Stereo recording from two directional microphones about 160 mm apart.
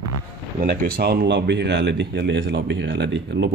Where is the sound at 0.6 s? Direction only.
70° right (ahead or behind).